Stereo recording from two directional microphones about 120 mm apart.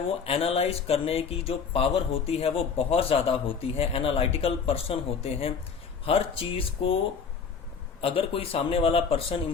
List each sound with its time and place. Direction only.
0.3 s speech: 55° left (ahead or behind)
8.0 s speech: 50° left (ahead or behind)